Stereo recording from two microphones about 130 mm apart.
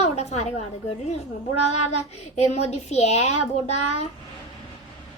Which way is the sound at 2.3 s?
55° left (ahead or behind).